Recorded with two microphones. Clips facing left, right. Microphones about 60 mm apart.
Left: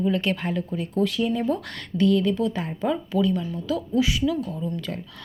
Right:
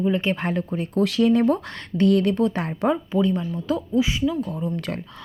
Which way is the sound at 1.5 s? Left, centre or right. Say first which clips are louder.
Right 3 dB; right.